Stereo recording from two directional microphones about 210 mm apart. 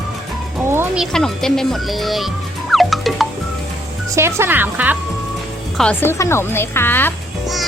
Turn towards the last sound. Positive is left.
turn(degrees=5)  # may be behind; listen again after turning